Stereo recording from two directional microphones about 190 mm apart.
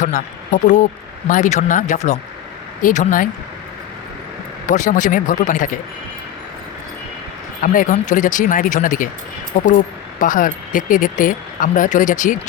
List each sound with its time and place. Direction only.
0.0 s speech: 40° left (ahead or behind)
4.7 s speech: 40° left (ahead or behind)
7.6 s speech: 45° left (ahead or behind)